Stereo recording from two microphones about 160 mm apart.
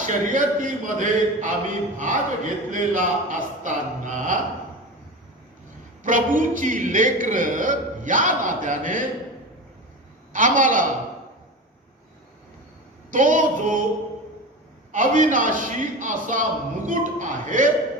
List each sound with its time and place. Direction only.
0.0 s a man's voice: 55° right (ahead or behind)
6.0 s a man's voice: 55° right (ahead or behind)
10.3 s a man's voice: 55° right (ahead or behind)
13.1 s a man's voice: 55° right (ahead or behind)
14.9 s a man's voice: 55° right (ahead or behind)